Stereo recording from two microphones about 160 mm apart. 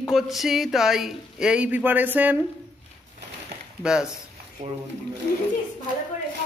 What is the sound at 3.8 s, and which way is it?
Speech, 5° right (ahead or behind).